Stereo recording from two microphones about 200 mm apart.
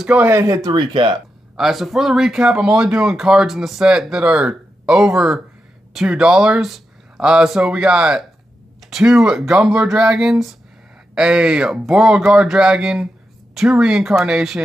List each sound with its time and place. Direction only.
0.0 s speech: 10° right (ahead or behind); by 1.1 s 25° right (ahead or behind)
1.6 s speech: centre (ahead or behind)